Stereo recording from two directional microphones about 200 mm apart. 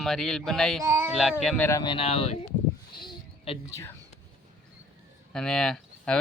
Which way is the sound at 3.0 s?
25° left (ahead or behind).